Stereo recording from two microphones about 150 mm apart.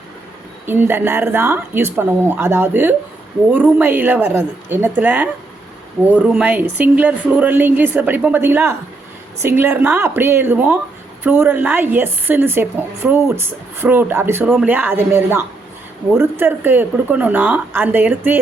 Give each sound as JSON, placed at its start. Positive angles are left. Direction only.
{"t": 0.6, "sound": "speech", "side_deg": -15}